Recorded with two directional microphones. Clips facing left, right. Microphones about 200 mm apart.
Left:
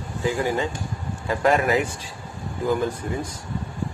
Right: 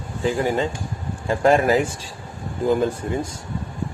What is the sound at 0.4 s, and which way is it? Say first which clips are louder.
Speech: right 2 dB; 25° right (ahead or behind).